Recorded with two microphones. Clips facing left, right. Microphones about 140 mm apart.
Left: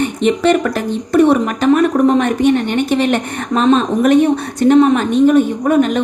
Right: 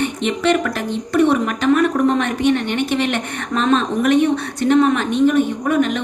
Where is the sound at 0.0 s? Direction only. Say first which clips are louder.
Left 5 dB; 40° left (ahead or behind).